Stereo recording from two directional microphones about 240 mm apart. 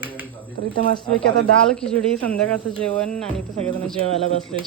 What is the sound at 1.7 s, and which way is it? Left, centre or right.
Speech, centre.